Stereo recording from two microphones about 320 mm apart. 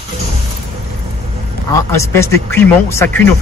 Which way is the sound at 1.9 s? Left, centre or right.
Centre.